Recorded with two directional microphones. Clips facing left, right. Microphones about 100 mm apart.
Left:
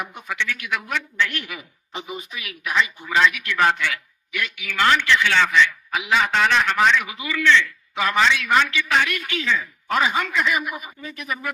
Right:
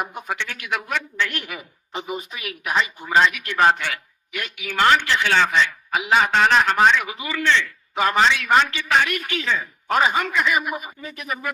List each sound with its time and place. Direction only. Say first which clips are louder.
0.0 s a woman's voice: right 1 dB; 40° right (ahead or behind)